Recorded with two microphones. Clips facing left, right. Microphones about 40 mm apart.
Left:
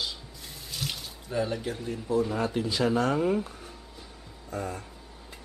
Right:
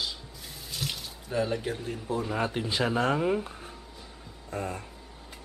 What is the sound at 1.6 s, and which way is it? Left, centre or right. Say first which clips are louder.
Speech: even; centre.